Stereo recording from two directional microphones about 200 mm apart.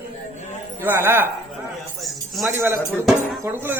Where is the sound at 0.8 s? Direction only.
10° right (ahead or behind).